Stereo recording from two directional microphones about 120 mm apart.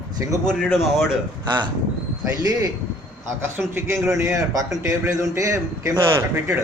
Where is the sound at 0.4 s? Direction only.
Centre (ahead or behind).